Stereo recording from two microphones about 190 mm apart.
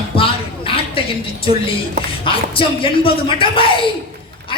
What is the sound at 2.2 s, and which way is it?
Speech, 25° left (ahead or behind).